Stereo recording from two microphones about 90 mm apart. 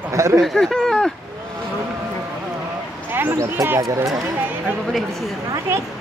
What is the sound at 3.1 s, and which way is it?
Speech, 25° right (ahead or behind).